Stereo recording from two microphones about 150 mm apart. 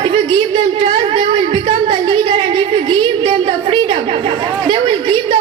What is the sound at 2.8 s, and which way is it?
Chatter, 35° right (ahead or behind).